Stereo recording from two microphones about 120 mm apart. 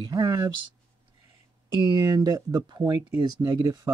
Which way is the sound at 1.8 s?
35° right (ahead or behind).